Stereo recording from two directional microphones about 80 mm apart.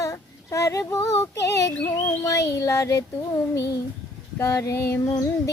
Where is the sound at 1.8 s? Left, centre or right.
Left.